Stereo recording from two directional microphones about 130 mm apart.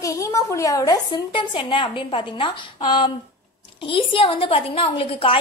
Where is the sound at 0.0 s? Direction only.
25° left (ahead or behind).